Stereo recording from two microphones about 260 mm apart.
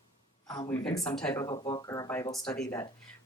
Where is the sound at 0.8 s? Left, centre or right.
Centre.